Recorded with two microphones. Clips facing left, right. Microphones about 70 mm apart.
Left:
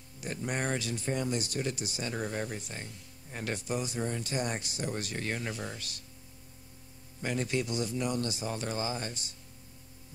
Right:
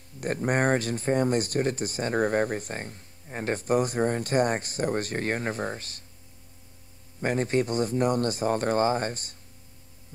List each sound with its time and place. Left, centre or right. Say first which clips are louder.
0.2 s speech: right 9 dB; right
7.2 s speech: right 7 dB; right